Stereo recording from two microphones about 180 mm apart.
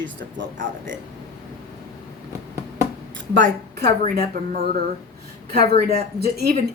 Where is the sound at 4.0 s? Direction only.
50° right (ahead or behind).